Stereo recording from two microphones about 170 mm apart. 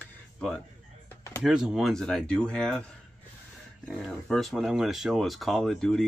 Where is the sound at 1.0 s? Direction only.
15° left (ahead or behind).